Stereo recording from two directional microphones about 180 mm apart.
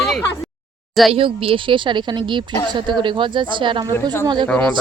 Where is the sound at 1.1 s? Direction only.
30° right (ahead or behind).